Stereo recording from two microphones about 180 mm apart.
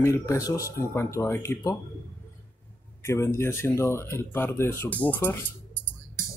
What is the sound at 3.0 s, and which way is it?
Speech, 15° left (ahead or behind).